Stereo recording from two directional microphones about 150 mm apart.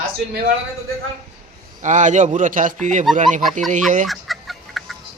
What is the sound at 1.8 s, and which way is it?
A man's voice, 55° right (ahead or behind).